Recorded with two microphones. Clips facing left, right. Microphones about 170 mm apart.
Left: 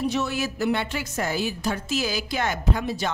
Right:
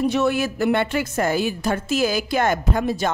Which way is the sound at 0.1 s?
55° right (ahead or behind).